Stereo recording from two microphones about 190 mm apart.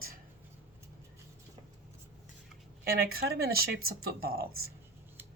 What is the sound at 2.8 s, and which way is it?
Speech, 55° right (ahead or behind).